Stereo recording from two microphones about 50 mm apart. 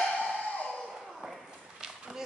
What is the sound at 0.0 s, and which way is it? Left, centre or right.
Music, left.